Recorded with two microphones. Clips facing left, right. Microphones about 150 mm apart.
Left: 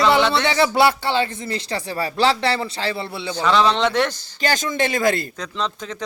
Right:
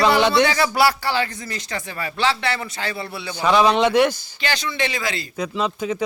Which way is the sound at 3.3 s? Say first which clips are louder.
Right 1 dB; 15° right (ahead or behind).